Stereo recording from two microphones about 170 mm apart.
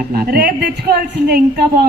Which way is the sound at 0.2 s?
60° right (ahead or behind).